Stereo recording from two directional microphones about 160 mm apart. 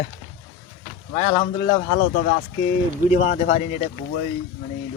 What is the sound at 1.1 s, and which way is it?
Speech, 40° left (ahead or behind).